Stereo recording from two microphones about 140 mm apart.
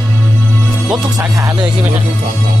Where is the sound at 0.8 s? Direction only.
5° right (ahead or behind).